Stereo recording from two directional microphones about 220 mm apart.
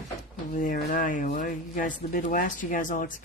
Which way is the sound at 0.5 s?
40° left (ahead or behind).